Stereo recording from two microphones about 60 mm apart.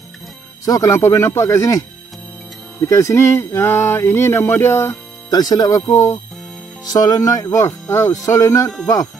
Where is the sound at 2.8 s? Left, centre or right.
Left.